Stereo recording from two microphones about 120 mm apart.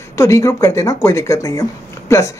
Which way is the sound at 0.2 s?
25° left (ahead or behind).